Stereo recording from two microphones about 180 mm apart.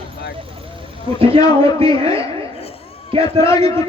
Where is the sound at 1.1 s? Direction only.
30° right (ahead or behind).